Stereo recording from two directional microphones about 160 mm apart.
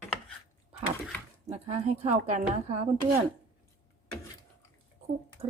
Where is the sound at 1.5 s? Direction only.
45° right (ahead or behind).